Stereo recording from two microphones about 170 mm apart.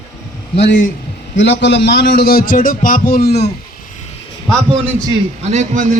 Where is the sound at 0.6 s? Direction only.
90° left; by 3.5 s 70° left (ahead or behind).